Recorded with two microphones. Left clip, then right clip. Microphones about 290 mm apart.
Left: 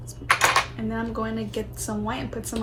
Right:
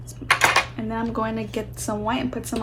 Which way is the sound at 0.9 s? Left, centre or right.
Right.